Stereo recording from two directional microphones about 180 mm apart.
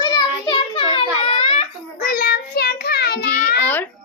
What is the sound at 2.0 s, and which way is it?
Child singing, 55° left (ahead or behind).